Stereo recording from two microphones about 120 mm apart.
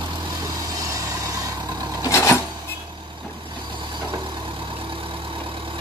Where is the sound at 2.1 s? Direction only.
25° left (ahead or behind).